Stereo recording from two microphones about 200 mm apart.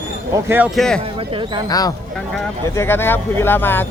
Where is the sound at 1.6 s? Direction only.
20° left (ahead or behind).